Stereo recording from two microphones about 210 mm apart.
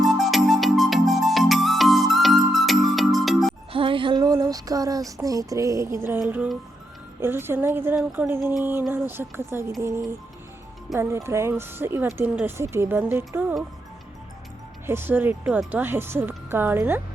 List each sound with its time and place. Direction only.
0.0 s music: centre (ahead or behind)
3.7 s a sound: 25° right (ahead or behind)
6.2 s speech: 5° right (ahead or behind)
10.9 s speech: 10° right (ahead or behind)
14.8 s speech: 10° right (ahead or behind)